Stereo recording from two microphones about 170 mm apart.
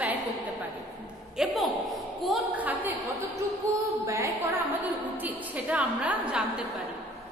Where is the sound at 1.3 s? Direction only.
Centre (ahead or behind).